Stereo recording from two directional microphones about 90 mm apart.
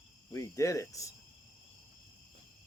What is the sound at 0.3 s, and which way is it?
Cricket, 35° left (ahead or behind).